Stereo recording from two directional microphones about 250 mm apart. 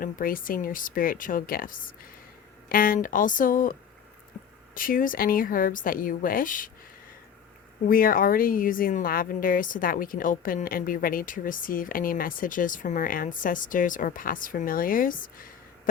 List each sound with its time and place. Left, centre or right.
0.0 s speech: left
7.9 s speech: left